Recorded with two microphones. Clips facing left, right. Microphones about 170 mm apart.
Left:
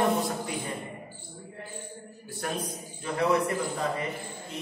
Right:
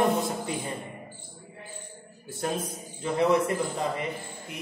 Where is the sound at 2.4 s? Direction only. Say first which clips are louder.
Right 3 dB; 25° right (ahead or behind).